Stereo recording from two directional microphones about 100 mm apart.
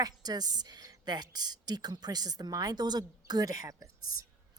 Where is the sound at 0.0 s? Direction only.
40° right (ahead or behind).